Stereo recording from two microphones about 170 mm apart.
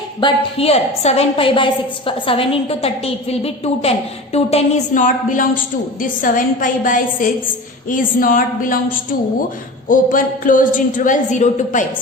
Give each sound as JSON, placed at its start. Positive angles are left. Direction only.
{"t": 0.2, "sound": "a woman's voice", "side_deg": 30}